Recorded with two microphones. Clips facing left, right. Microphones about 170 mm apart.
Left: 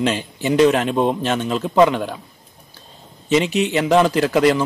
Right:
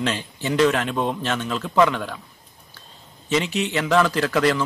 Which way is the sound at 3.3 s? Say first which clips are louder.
Left 5 dB; 20° left (ahead or behind).